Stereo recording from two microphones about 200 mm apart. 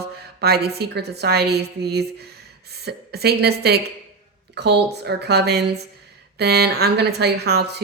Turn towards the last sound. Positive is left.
turn(degrees=-55)  # may be behind; listen again after turning